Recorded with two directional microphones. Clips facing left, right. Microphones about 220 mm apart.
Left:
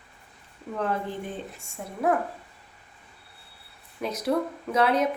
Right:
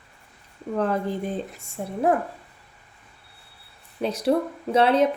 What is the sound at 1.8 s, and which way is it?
Speech, 35° right (ahead or behind).